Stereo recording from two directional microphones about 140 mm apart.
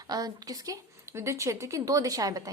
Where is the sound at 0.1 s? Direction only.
25° right (ahead or behind).